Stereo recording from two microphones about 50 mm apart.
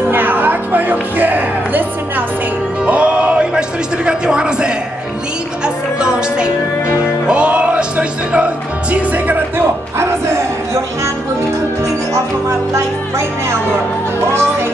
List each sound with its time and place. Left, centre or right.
0.1 s speech: right
2.8 s speech: right
5.9 s music: centre; by 9.4 s right
9.9 s music: right
12.1 s speech: right